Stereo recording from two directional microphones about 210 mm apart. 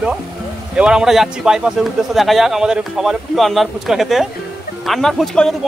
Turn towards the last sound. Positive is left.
turn(degrees=0)  # may be behind; listen again after turning